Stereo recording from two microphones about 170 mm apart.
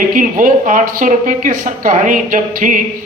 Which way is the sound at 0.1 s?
50° right (ahead or behind).